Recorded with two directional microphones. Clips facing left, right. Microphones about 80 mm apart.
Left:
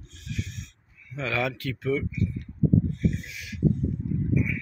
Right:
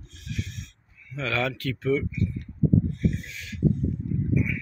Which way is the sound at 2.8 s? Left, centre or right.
Centre.